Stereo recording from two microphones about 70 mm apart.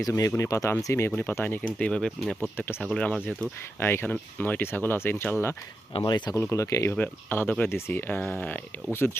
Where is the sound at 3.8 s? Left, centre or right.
Left.